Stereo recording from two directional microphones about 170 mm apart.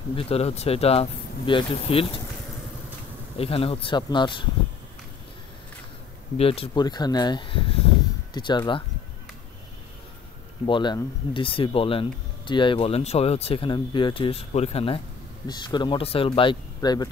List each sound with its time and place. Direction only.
0.1 s speech: 35° left (ahead or behind)
3.3 s speech: 35° left (ahead or behind)
6.3 s speech: 35° left (ahead or behind)
10.7 s speech: 25° left (ahead or behind)